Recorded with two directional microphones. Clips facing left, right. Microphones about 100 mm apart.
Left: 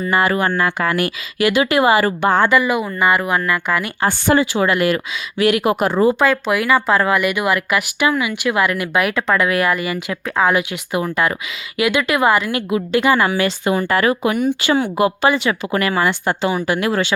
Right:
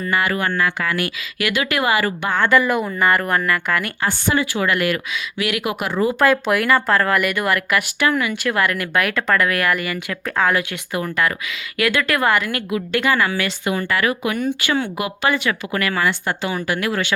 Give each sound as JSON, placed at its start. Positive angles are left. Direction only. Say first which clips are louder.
{"t": 0.1, "sound": "a woman's voice", "louder": "left 4 dB", "side_deg": 30}
{"t": 2.5, "sound": "speech", "louder": "left 1 dB", "side_deg": 5}
{"t": 4.4, "sound": "a woman's voice", "louder": "left 4 dB", "side_deg": 30}
{"t": 6.2, "sound": "speech", "louder": "even", "side_deg": 0}
{"t": 10.5, "sound": "a woman's voice", "louder": "left 3 dB", "side_deg": 20}